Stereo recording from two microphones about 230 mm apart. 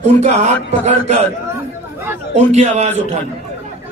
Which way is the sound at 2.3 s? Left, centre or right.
Right.